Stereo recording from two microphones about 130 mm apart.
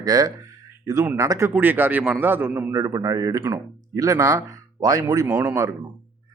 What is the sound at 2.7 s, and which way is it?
Speech, 30° right (ahead or behind).